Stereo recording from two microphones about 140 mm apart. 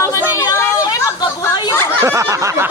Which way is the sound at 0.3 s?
20° left (ahead or behind).